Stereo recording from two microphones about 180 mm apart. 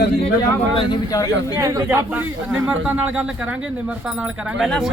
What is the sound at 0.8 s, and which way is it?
Speech, 20° left (ahead or behind).